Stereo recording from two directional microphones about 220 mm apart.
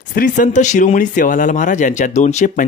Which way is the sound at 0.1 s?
35° left (ahead or behind).